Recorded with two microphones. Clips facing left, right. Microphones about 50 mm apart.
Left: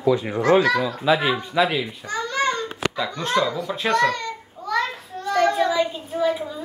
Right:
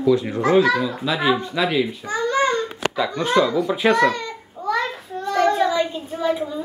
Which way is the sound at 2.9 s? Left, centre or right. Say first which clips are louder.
Right 5 dB; centre.